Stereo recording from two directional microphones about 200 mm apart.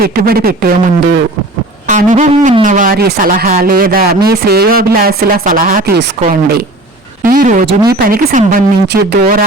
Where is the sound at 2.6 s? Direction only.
40° right (ahead or behind).